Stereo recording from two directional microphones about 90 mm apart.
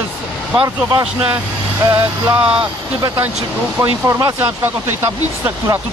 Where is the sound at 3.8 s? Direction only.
35° right (ahead or behind).